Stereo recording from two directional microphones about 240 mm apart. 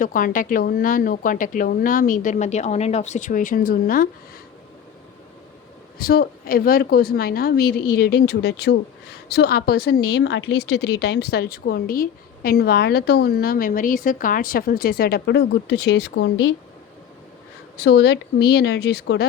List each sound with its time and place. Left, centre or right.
0.0 s speech: left
6.0 s speech: left
17.7 s speech: left